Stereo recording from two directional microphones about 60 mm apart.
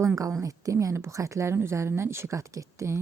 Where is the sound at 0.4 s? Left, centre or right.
Right.